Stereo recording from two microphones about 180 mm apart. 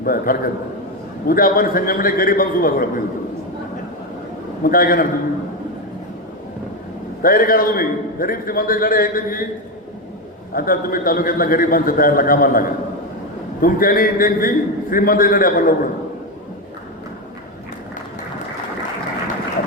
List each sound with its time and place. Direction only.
0.0 s a man's voice: 55° left (ahead or behind)
4.6 s a man's voice: 50° left (ahead or behind)
7.2 s a man's voice: 50° left (ahead or behind)
10.5 s a man's voice: 55° left (ahead or behind)